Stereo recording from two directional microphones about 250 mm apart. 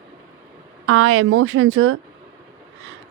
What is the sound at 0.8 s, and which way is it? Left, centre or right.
Speech, right.